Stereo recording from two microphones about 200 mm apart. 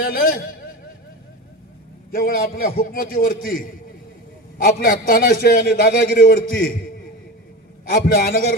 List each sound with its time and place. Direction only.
0.0 s a sound: 45° left (ahead or behind)
2.1 s a man's voice: 45° left (ahead or behind)
6.3 s a man's voice: 45° left (ahead or behind)
7.9 s a man's voice: 50° left (ahead or behind)